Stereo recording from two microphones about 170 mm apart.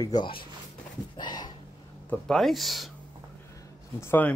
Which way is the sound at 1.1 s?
25° left (ahead or behind).